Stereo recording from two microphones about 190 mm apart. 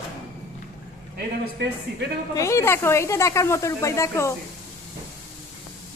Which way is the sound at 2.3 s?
15° left (ahead or behind).